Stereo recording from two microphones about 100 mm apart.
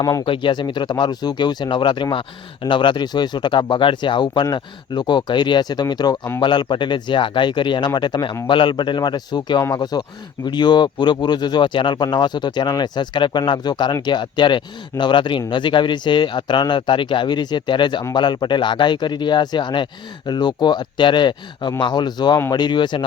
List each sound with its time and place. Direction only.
0.0 s speech: 35° left (ahead or behind)
0.3 s speech: 55° left (ahead or behind)